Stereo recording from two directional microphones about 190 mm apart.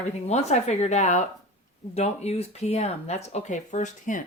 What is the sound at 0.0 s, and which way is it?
A woman's voice, 35° left (ahead or behind).